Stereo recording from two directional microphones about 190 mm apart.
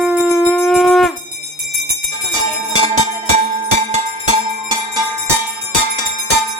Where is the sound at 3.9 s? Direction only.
30° right (ahead or behind).